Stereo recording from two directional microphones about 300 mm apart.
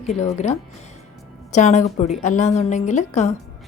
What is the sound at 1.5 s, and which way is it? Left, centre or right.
Speech, left.